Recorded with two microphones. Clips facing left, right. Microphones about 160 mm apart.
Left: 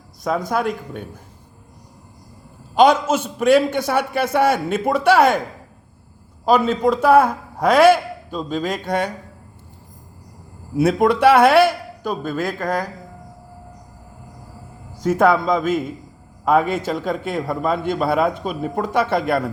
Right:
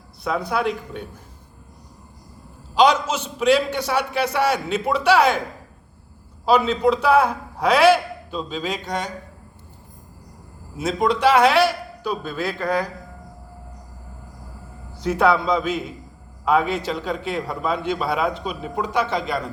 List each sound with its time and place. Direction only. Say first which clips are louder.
0.3 s a man's voice: left 2 dB; 45° left (ahead or behind)
2.7 s a man's voice: left 3 dB; 50° left (ahead or behind)
6.4 s a man's voice: left 1 dB; 50° left (ahead or behind)
10.8 s a man's voice: left 5 dB; 60° left (ahead or behind); by 12.9 s 40° left (ahead or behind)
15.0 s a man's voice: left 3 dB; 50° left (ahead or behind)